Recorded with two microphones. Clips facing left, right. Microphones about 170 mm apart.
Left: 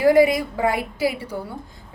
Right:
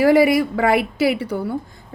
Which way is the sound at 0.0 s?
75° right (ahead or behind).